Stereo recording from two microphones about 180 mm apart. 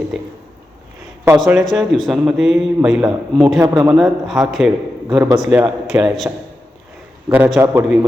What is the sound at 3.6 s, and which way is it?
Speech, 15° right (ahead or behind).